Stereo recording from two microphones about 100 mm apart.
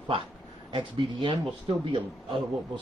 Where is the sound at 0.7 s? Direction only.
60° right (ahead or behind).